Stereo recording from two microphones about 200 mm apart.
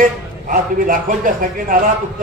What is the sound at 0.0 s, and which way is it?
A man's voice, 45° right (ahead or behind).